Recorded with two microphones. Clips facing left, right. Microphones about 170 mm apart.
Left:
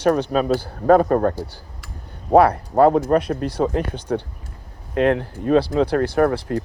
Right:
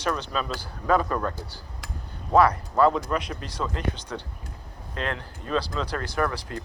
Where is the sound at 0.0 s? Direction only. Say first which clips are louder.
Left 10 dB; 55° left (ahead or behind).